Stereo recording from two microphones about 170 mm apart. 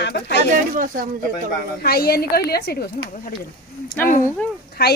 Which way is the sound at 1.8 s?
65° left (ahead or behind).